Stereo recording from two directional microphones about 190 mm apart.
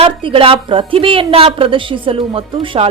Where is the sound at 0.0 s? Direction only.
25° right (ahead or behind).